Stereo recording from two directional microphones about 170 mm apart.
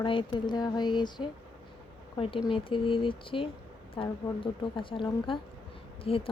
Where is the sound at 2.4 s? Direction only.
30° left (ahead or behind).